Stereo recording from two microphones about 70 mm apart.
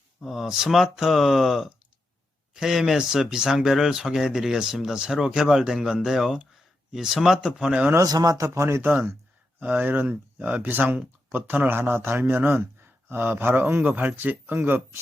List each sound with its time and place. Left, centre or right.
0.2 s speech: centre
8.0 s speech: right
8.8 s a man's voice: right